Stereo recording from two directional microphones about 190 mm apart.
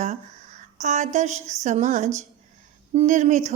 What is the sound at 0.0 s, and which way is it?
A woman's voice, 35° right (ahead or behind).